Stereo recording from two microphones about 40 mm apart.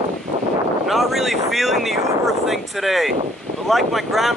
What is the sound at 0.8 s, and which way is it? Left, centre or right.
Speech, centre.